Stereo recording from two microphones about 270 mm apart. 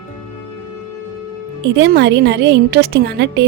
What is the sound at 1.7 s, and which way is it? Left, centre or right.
A woman's voice, right.